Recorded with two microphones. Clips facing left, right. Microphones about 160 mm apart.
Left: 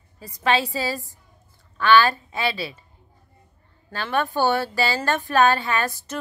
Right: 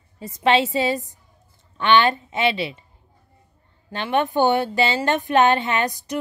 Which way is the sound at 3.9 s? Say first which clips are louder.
Right 3 dB; 20° right (ahead or behind).